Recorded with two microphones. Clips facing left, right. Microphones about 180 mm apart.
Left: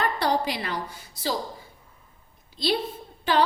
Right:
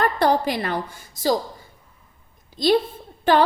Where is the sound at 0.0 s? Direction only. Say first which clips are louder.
Right 5 dB; 50° right (ahead or behind).